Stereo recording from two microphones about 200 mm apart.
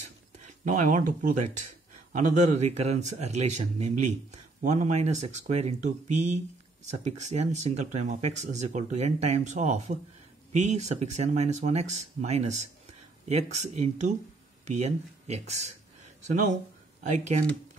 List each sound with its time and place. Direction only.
0.4 s speech: 40° right (ahead or behind)